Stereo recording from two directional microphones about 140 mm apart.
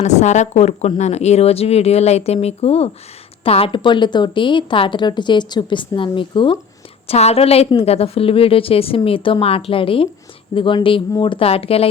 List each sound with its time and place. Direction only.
0.0 s a woman's voice: 55° left (ahead or behind); by 6.6 s 35° left (ahead or behind)
7.1 s a woman's voice: 45° left (ahead or behind)